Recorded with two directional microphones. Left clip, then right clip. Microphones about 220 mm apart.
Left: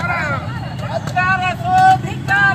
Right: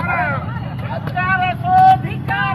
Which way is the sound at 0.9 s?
15° left (ahead or behind).